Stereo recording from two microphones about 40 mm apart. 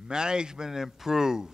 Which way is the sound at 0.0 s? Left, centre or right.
Centre.